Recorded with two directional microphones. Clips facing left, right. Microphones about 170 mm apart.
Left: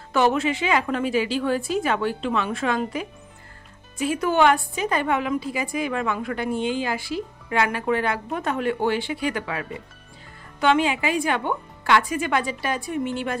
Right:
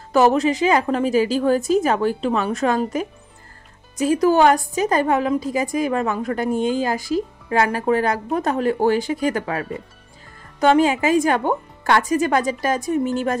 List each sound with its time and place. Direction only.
0.1 s a woman's voice: 40° right (ahead or behind)